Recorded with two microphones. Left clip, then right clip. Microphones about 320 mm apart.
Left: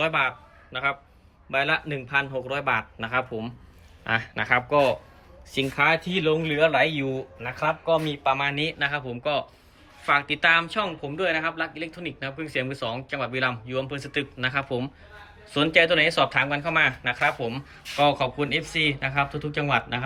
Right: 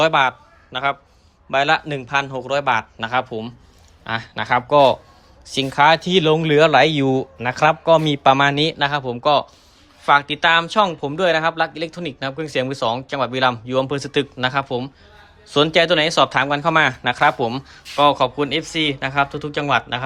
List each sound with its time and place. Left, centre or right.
0.0 s a man's voice: centre
7.9 s speech: right
8.5 s speech: centre